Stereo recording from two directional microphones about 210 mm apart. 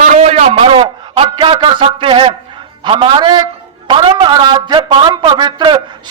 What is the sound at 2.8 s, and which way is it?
A man's voice, 25° right (ahead or behind).